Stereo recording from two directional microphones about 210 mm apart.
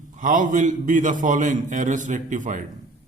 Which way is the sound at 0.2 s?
40° right (ahead or behind).